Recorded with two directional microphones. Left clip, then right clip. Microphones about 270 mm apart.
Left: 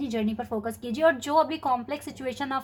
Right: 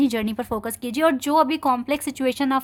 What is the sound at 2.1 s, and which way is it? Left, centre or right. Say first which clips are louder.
Speech: right 8 dB; right.